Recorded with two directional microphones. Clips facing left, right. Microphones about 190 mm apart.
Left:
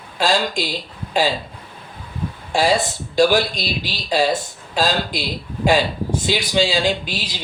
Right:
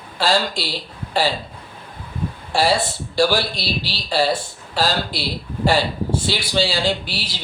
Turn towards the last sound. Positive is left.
turn(degrees=15)  # may be behind; listen again after turning